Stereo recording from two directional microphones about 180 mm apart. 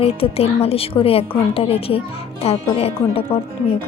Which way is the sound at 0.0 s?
35° left (ahead or behind).